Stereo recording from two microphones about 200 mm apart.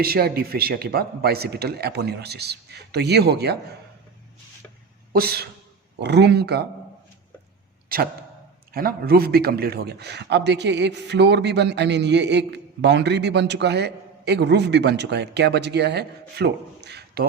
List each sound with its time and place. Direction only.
0.0 s speech: 50° right (ahead or behind)
5.1 s a man's voice: 50° right (ahead or behind)
8.7 s a man's voice: 50° right (ahead or behind)